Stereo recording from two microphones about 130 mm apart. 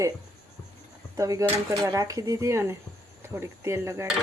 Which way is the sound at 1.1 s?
25° right (ahead or behind).